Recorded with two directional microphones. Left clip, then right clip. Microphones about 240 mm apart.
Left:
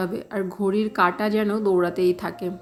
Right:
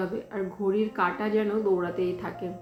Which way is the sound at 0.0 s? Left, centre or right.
Left.